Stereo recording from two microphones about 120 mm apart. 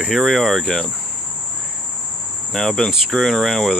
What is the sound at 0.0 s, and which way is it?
Speech, centre (ahead or behind).